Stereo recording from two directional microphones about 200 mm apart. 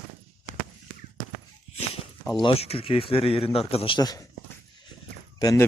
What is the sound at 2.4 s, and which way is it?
Speech, 25° left (ahead or behind).